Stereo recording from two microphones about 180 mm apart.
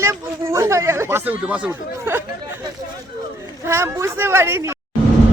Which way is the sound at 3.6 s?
15° right (ahead or behind).